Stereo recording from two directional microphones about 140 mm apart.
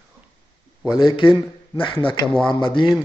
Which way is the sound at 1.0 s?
40° left (ahead or behind).